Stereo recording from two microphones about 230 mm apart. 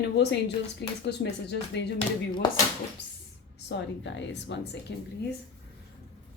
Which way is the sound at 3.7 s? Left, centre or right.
Left.